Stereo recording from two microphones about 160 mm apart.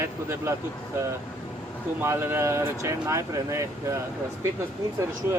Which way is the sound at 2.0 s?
15° right (ahead or behind).